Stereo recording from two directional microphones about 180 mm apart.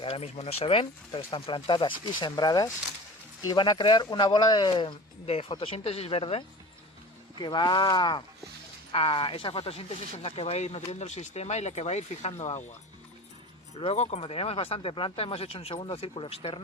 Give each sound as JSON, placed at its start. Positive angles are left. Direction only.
{"t": 0.0, "sound": "speech", "side_deg": 35}
{"t": 13.7, "sound": "speech", "side_deg": 35}